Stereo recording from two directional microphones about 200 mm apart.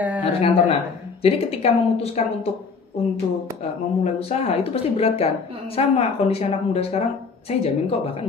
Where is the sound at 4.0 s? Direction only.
30° left (ahead or behind).